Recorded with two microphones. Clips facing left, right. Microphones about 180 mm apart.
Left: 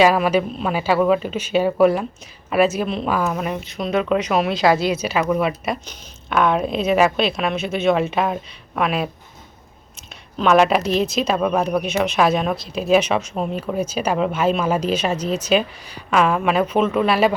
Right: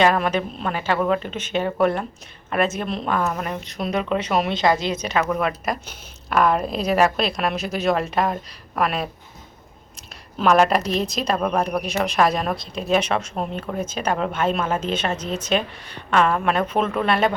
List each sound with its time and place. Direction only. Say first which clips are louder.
0.0 s speech: left 3 dB; 5° left (ahead or behind)
10.3 s speech: left 2 dB; centre (ahead or behind)